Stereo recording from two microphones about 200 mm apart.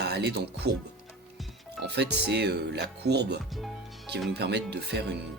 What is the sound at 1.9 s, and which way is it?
Speech, 55° right (ahead or behind).